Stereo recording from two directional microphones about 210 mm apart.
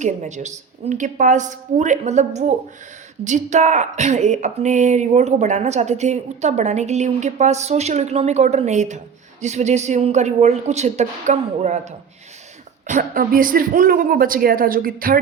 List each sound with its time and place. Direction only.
0.0 s a woman's voice: 35° right (ahead or behind)